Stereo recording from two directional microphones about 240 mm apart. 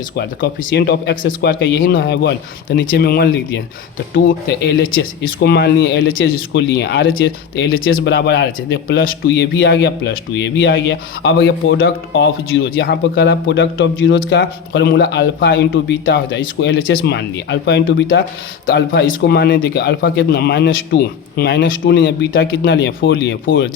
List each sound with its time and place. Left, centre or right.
0.2 s speech: left
6.2 s speech: left
18.7 s speech: left